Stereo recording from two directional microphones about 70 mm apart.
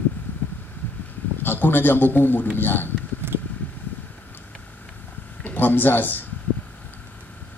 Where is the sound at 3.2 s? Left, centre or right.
Right.